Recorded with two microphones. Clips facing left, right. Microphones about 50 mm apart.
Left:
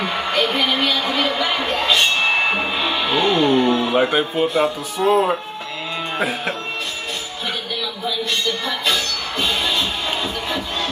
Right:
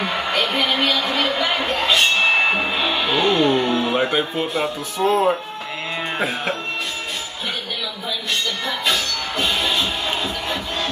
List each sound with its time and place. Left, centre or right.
0.0 s a sound: centre
0.5 s speech: centre
2.2 s music: centre
4.9 s speech: centre
8.6 s music: centre